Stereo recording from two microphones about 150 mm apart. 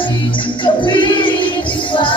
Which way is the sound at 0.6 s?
35° left (ahead or behind).